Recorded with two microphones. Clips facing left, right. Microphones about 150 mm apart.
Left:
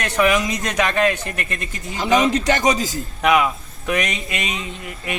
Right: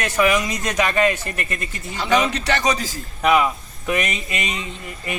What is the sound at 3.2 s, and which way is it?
A man's voice, centre (ahead or behind).